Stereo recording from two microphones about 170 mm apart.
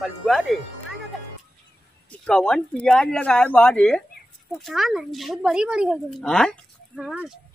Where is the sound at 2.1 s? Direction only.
5° left (ahead or behind).